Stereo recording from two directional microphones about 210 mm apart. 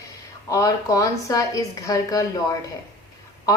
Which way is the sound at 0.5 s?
15° left (ahead or behind).